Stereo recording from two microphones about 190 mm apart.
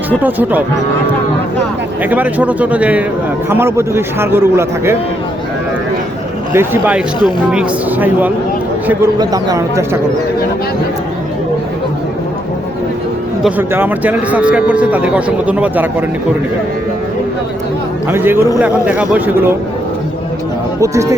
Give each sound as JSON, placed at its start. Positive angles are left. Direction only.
{"t": 0.2, "sound": "a man's voice", "side_deg": -10}
{"t": 2.0, "sound": "a man's voice", "side_deg": -10}
{"t": 6.5, "sound": "a man's voice", "side_deg": -10}
{"t": 9.1, "sound": "a man's voice", "side_deg": -20}
{"t": 13.4, "sound": "a man's voice", "side_deg": -10}
{"t": 18.1, "sound": "a man's voice", "side_deg": -10}
{"t": 20.8, "sound": "a man's voice", "side_deg": -15}